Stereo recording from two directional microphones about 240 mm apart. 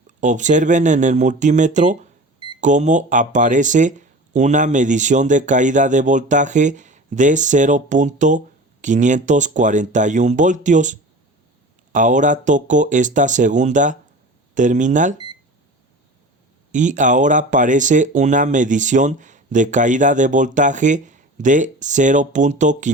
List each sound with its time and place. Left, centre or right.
0.2 s speech: right
16.7 s speech: right